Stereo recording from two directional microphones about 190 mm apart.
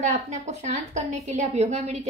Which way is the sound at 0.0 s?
35° right (ahead or behind).